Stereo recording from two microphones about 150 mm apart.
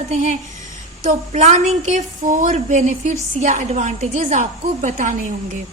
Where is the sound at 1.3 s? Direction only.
55° right (ahead or behind).